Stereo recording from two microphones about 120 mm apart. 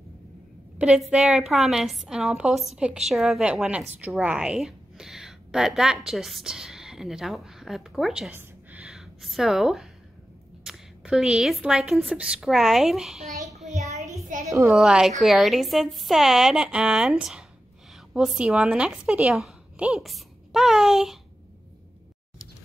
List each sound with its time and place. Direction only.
0.7 s a woman's voice: 10° right (ahead or behind)
8.3 s a sound: 15° right (ahead or behind)
10.6 s a woman's voice: 5° right (ahead or behind)
13.7 s child singing: 70° right (ahead or behind)
14.4 s a sound: 25° right (ahead or behind)
14.7 s a woman's voice: 5° right (ahead or behind)